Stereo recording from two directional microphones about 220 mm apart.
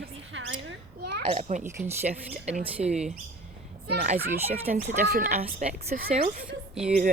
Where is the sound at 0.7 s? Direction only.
50° right (ahead or behind).